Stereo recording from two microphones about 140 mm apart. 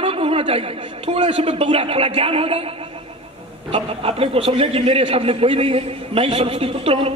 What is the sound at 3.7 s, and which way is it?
A man's voice, 45° right (ahead or behind).